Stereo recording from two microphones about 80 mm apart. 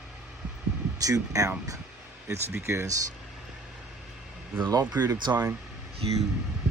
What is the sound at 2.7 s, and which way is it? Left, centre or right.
Speech, right.